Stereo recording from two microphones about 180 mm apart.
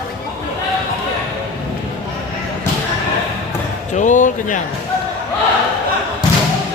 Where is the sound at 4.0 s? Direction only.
45° left (ahead or behind).